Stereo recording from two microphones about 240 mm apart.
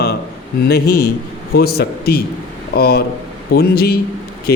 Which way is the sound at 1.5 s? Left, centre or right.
Left.